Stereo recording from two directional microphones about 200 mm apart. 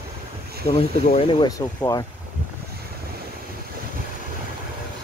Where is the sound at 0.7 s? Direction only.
30° left (ahead or behind).